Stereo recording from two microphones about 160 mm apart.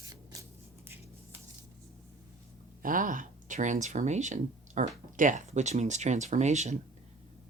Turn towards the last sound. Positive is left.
turn(degrees=-45)  # may be behind; listen again after turning